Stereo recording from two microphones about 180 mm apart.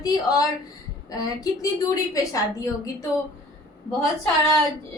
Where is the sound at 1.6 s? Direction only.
20° left (ahead or behind).